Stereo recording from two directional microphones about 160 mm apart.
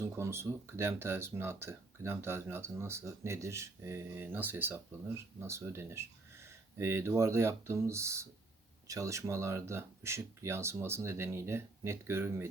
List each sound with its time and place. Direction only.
0.0 s speech: 15° right (ahead or behind)